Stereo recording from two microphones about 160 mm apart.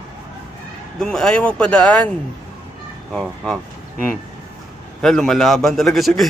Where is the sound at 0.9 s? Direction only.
5° left (ahead or behind).